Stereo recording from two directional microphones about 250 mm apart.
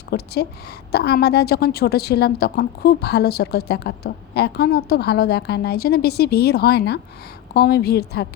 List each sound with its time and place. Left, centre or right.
0.1 s a woman's voice: left